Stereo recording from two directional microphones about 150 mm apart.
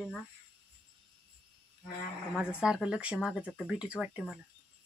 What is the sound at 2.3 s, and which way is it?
Speech, 5° right (ahead or behind).